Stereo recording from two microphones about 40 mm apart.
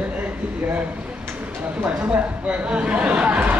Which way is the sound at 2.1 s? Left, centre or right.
Right.